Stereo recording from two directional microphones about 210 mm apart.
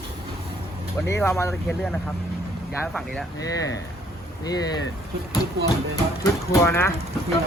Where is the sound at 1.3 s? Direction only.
15° left (ahead or behind).